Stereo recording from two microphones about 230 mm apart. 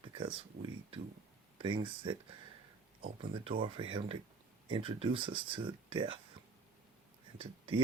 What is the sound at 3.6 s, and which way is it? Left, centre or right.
Speech, right.